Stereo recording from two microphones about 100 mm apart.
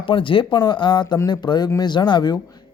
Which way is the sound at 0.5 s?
50° left (ahead or behind).